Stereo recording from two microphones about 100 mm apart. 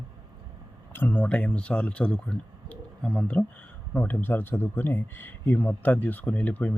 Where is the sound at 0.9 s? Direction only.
15° left (ahead or behind).